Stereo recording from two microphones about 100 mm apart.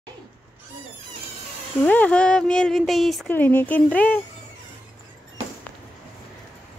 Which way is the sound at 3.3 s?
20° left (ahead or behind).